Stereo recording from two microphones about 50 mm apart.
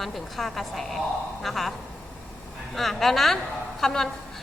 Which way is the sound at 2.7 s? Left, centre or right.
Centre.